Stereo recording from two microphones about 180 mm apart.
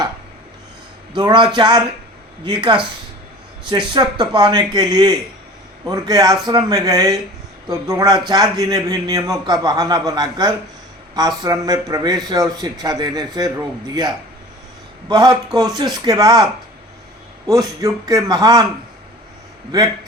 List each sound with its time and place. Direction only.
1.1 s a man's voice: 25° right (ahead or behind)
3.7 s a man's voice: 25° right (ahead or behind)
15.1 s a man's voice: 25° right (ahead or behind)